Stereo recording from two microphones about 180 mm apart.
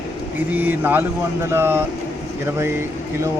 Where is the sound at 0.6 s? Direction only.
10° right (ahead or behind).